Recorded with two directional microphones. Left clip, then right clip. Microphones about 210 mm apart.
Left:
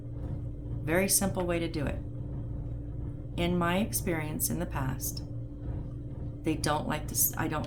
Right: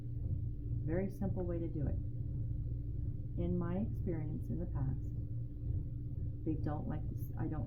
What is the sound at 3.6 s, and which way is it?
A woman's voice, 25° left (ahead or behind).